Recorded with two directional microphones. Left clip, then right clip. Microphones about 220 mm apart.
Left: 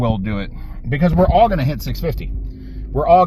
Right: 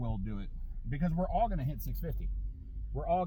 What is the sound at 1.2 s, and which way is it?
Speech, 10° right (ahead or behind).